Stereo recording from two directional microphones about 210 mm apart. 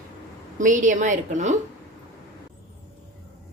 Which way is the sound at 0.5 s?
35° right (ahead or behind).